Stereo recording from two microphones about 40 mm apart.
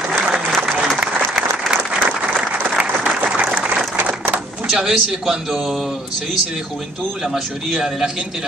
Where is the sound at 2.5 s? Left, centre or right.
Centre.